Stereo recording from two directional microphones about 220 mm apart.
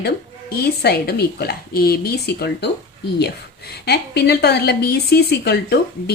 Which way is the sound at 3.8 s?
50° left (ahead or behind).